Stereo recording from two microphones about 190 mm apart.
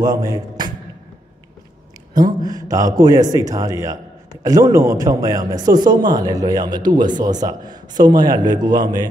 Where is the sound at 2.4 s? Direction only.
20° right (ahead or behind).